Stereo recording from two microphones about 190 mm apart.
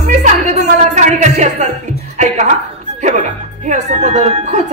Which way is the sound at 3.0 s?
40° right (ahead or behind).